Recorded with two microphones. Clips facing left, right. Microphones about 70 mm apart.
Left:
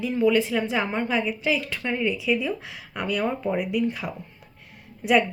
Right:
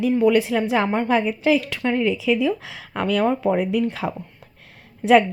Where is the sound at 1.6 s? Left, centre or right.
Right.